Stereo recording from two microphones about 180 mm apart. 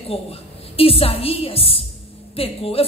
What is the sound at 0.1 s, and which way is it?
A woman's voice, 30° left (ahead or behind).